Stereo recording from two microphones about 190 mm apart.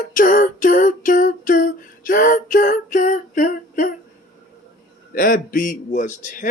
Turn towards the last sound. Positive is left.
turn(degrees=45)  # may be behind; listen again after turning